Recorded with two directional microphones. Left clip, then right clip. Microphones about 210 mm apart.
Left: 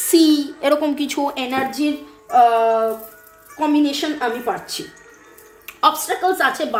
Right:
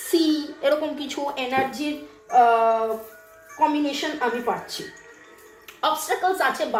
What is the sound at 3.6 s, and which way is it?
Speech, 50° left (ahead or behind).